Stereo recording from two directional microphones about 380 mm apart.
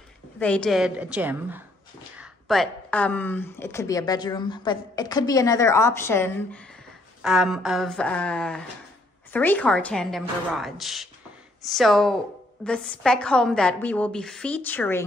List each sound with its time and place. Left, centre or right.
0.4 s a woman's voice: centre